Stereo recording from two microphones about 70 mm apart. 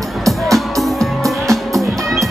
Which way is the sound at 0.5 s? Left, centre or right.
Centre.